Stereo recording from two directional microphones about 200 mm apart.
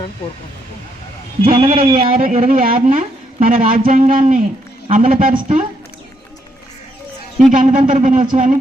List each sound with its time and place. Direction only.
1.5 s a man's voice: 25° right (ahead or behind)
2.1 s speech: 40° right (ahead or behind)
7.5 s speech: 40° right (ahead or behind)